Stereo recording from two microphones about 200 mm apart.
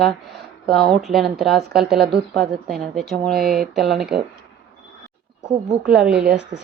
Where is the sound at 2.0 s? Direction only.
55° right (ahead or behind).